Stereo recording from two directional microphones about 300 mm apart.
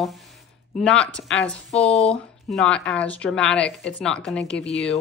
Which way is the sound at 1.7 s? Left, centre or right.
Left.